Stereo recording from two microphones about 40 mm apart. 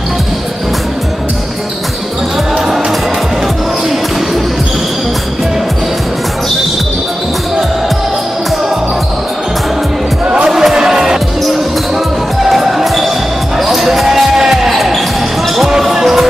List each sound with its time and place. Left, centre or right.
10.2 s music: right
10.5 s music: centre
12.4 s music: centre
13.6 s basketball bounce: centre
15.9 s music: centre